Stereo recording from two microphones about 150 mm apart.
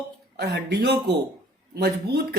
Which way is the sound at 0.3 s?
90° right.